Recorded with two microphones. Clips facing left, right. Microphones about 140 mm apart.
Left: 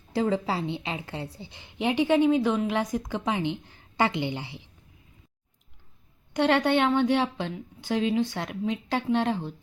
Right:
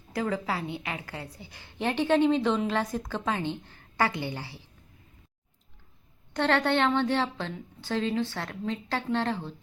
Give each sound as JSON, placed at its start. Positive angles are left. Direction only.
{"t": 0.1, "sound": "a woman's voice", "side_deg": 25}
{"t": 6.3, "sound": "a woman's voice", "side_deg": 15}